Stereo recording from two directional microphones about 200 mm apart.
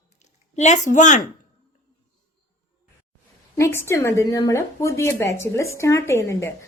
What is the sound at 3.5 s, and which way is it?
A woman's voice, 15° left (ahead or behind).